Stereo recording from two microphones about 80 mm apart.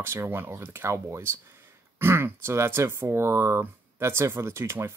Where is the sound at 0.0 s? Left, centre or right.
Right.